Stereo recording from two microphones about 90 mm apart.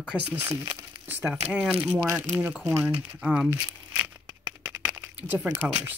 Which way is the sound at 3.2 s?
5° right (ahead or behind).